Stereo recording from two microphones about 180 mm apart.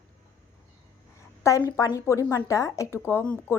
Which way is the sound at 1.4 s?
15° left (ahead or behind).